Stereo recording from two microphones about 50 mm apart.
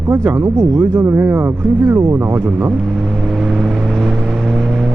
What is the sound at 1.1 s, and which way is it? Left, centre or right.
Speech, right.